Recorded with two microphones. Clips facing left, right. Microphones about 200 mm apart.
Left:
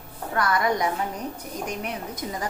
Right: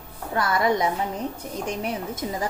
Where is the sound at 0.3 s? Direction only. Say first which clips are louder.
Right 2 dB; 25° right (ahead or behind).